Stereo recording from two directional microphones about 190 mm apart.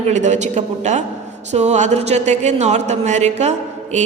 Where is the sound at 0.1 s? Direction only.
40° right (ahead or behind).